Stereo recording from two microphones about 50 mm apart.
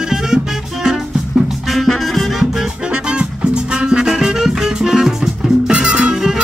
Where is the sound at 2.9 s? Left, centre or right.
Centre.